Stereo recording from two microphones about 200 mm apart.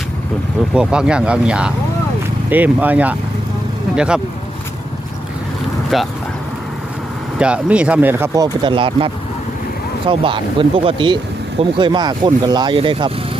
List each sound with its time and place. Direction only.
0.7 s speech: 5° right (ahead or behind)
5.9 s speech: centre (ahead or behind)
7.3 s speech: 5° right (ahead or behind)
8.6 s speech: 25° right (ahead or behind)
10.1 s speech: 25° right (ahead or behind)